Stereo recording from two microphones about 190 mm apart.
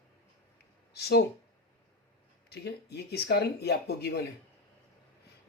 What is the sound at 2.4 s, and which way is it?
Speech, 60° left (ahead or behind).